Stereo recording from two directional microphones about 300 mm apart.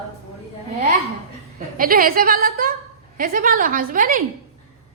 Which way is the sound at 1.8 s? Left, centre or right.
Right.